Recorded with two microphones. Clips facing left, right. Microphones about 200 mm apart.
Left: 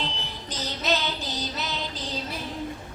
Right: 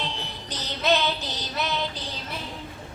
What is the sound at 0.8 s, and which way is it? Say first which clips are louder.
Child singing: right 5 dB; 60° right (ahead or behind).